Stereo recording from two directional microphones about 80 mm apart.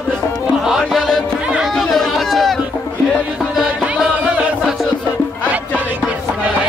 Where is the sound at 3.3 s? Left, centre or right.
Centre.